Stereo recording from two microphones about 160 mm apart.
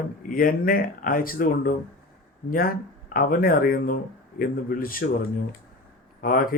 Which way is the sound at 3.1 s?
65° left (ahead or behind).